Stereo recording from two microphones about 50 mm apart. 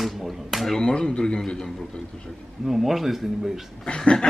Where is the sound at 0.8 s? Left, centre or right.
Centre.